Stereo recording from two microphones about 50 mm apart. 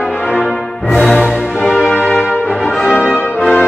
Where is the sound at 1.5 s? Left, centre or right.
Centre.